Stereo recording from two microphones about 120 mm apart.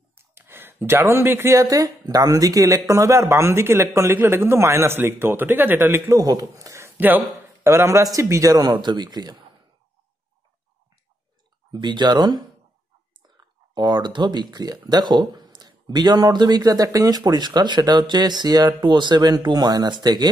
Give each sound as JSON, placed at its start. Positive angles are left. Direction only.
{"t": 0.1, "sound": "speech", "side_deg": -20}
{"t": 11.7, "sound": "speech", "side_deg": -40}
{"t": 13.7, "sound": "speech", "side_deg": -40}